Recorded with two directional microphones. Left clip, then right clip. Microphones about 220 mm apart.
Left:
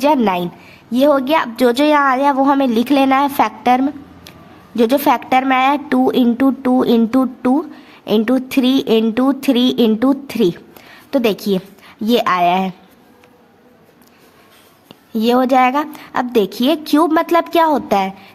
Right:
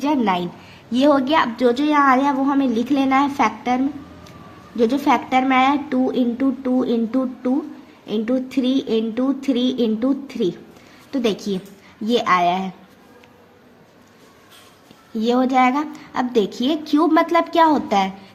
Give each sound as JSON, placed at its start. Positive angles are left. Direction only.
{"t": 0.0, "sound": "a woman's voice", "side_deg": 40}
{"t": 15.1, "sound": "a woman's voice", "side_deg": 40}